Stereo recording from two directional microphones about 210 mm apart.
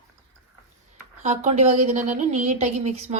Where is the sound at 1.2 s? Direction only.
35° right (ahead or behind).